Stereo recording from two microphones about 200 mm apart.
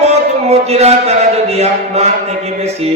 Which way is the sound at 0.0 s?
30° right (ahead or behind).